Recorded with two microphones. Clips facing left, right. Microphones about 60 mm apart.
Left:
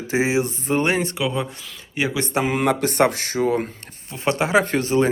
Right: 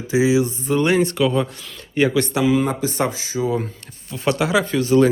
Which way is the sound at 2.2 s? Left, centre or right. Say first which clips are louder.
Right 4 dB; left.